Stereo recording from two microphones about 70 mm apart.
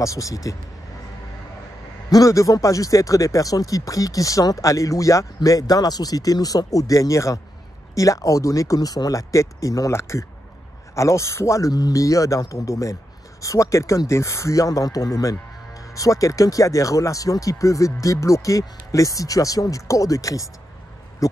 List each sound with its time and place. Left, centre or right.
0.0 s speech: left
2.0 s speech: left
11.7 s speech: left
21.2 s a sound: left